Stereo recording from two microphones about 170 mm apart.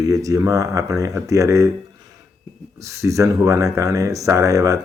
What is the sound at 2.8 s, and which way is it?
Speech, 15° right (ahead or behind).